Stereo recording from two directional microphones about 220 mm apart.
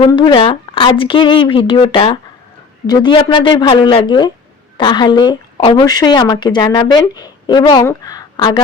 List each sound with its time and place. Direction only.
0.0 s speech: 20° left (ahead or behind)